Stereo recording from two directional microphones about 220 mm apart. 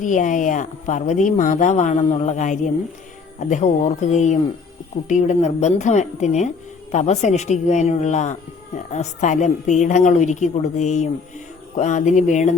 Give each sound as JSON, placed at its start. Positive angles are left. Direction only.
{"t": 0.0, "sound": "speech", "side_deg": 35}